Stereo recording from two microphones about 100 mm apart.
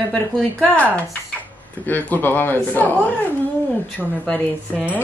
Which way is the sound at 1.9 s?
15° left (ahead or behind).